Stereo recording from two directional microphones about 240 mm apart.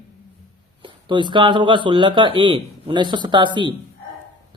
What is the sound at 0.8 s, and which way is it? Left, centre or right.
A man's voice, centre.